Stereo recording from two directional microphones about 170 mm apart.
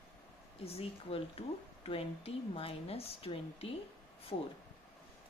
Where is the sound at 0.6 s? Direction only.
35° left (ahead or behind).